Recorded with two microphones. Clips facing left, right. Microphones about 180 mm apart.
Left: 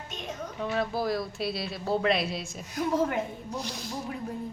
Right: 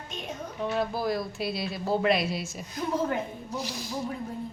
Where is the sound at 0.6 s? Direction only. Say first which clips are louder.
Right 1 dB; centre (ahead or behind).